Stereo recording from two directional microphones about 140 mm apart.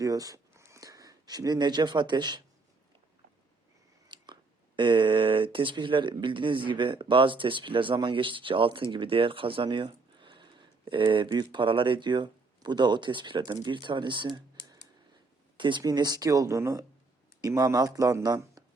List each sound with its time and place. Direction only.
0.0 s speech: 25° right (ahead or behind)
4.1 s chewing: 35° right (ahead or behind)
4.8 s speech: 35° right (ahead or behind)